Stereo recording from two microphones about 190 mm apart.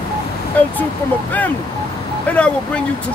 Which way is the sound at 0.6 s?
10° left (ahead or behind).